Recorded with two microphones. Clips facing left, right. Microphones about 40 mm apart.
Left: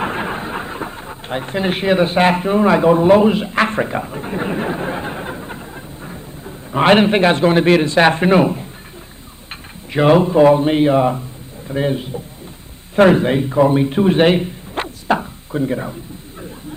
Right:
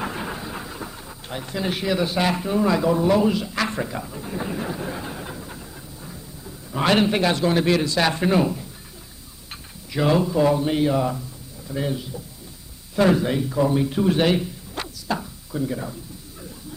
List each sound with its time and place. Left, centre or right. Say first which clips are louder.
0.0 s speech: left 7 dB; left
9.9 s a man's voice: left 8 dB; left